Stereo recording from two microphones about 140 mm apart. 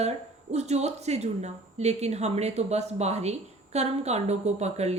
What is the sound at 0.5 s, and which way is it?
A woman's voice, 50° right (ahead or behind).